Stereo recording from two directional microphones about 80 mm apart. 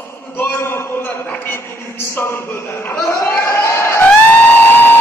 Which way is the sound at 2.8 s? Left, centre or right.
Left.